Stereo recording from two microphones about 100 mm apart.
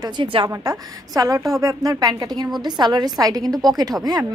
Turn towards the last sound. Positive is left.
turn(degrees=-40)  # may be behind; listen again after turning